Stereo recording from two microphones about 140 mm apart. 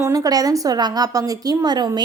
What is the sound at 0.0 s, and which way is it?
A woman's voice, 25° right (ahead or behind).